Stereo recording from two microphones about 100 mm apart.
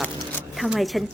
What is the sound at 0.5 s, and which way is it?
Speech, centre (ahead or behind).